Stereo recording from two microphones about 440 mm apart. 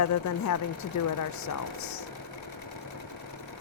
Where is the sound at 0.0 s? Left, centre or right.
Left.